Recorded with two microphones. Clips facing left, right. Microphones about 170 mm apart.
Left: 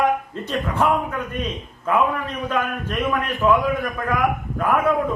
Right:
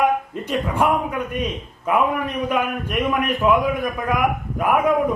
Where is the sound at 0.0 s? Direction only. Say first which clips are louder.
Right 1 dB; 10° right (ahead or behind).